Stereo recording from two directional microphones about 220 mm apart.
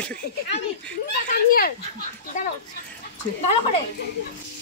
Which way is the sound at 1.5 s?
40° left (ahead or behind).